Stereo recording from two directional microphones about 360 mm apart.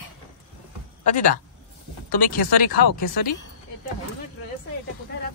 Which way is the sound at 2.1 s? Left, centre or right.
Left.